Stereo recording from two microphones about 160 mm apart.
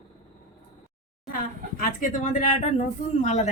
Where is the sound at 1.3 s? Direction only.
60° left (ahead or behind).